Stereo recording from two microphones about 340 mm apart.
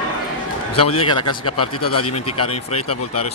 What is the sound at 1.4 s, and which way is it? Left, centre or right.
Speech, left.